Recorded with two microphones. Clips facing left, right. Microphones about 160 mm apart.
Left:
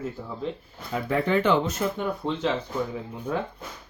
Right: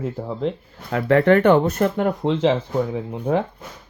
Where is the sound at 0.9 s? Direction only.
80° right.